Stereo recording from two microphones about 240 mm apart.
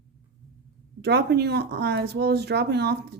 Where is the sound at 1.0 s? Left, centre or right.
Right.